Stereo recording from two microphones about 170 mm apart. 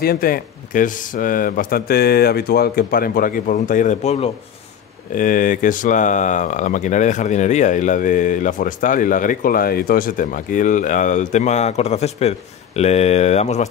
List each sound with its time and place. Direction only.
0.0 s speech: 60° left (ahead or behind); by 4.3 s 40° left (ahead or behind)
5.1 s speech: 50° left (ahead or behind)